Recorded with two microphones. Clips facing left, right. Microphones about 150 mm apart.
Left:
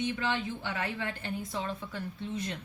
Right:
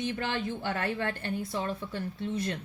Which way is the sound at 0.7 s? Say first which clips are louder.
Right 5 dB; 55° right (ahead or behind).